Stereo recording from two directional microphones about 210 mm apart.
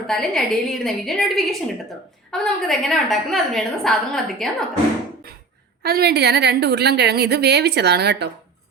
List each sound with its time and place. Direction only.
0.1 s a woman's voice: centre (ahead or behind)
5.8 s a woman's voice: 50° right (ahead or behind)